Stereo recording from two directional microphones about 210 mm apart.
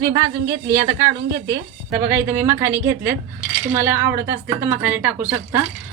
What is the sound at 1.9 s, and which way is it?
Speech, 10° right (ahead or behind).